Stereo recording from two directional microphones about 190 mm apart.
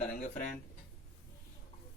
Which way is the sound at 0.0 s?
40° left (ahead or behind).